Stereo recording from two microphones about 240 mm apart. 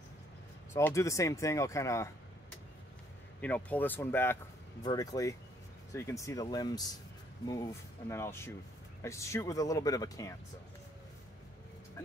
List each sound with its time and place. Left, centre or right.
0.7 s speech: centre
3.3 s speech: centre